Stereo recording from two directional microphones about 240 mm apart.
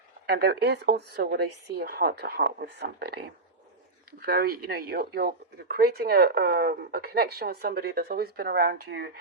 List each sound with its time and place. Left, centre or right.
0.3 s speech: right
4.3 s speech: right